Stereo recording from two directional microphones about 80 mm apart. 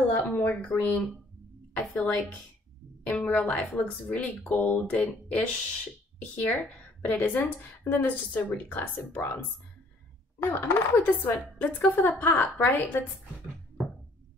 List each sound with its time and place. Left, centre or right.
0.1 s a woman's voice: left
10.4 s a woman's voice: left